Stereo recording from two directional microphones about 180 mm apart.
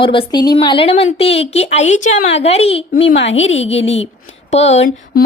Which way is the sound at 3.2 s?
90° left.